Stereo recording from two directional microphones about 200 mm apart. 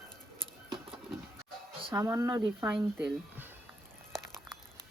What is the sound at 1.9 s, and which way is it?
Speech, 15° right (ahead or behind).